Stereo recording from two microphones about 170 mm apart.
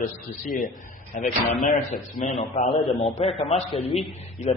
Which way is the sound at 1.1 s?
50° left (ahead or behind).